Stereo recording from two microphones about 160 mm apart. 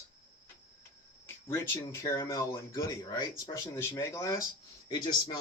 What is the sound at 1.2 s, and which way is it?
A man's voice, 15° left (ahead or behind).